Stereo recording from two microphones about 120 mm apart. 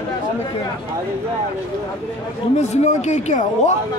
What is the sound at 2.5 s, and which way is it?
Speech, 70° left (ahead or behind).